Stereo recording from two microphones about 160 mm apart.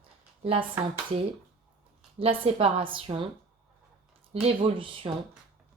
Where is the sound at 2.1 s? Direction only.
35° right (ahead or behind).